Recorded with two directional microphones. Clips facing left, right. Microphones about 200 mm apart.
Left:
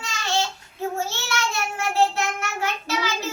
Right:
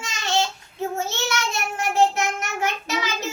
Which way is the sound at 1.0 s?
20° right (ahead or behind).